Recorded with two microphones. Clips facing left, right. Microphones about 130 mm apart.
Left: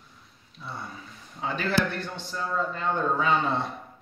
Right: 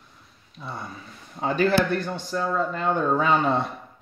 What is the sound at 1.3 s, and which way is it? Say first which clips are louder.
A man's voice: right 6 dB; 45° right (ahead or behind).